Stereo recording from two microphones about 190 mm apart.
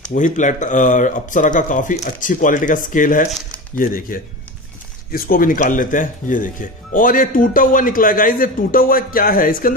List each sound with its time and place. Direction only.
0.1 s speech: 40° left (ahead or behind)